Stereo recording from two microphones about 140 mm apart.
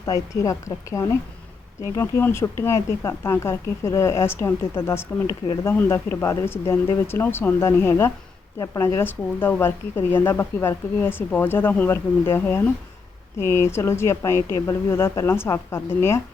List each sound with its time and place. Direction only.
0.0 s speech: 20° left (ahead or behind)